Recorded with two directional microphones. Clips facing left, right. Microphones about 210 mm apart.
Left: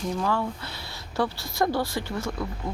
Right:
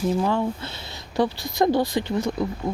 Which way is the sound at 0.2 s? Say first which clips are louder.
Right 4 dB; 20° right (ahead or behind).